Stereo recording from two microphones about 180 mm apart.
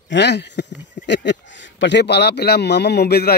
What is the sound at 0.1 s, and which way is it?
A man's voice, 70° left (ahead or behind).